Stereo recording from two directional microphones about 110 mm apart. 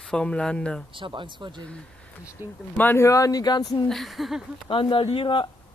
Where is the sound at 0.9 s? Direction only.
50° right (ahead or behind).